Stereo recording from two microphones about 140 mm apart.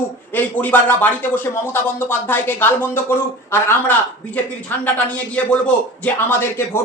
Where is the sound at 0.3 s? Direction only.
10° left (ahead or behind).